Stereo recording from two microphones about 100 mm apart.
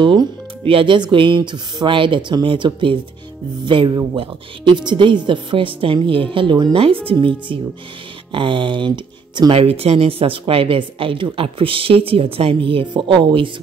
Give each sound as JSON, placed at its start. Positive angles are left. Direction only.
{"t": 0.0, "sound": "speech", "side_deg": -55}
{"t": 6.7, "sound": "speech", "side_deg": -65}
{"t": 9.6, "sound": "speech", "side_deg": -80}